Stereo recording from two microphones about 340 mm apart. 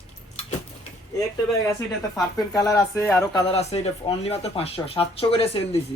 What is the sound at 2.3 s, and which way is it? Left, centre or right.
Speech, centre.